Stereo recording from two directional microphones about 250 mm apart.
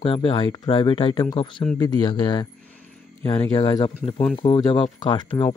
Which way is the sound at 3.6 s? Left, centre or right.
Centre.